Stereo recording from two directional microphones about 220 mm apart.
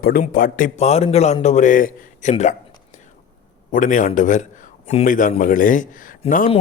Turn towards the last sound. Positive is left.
turn(degrees=30)  # may be behind; listen again after turning